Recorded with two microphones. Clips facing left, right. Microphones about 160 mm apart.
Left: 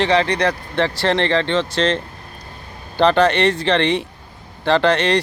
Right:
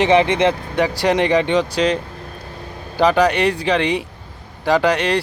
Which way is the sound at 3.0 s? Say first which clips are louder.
Even; 10° right (ahead or behind).